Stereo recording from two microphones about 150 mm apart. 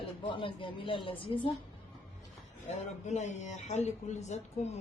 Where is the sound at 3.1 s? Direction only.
50° left (ahead or behind).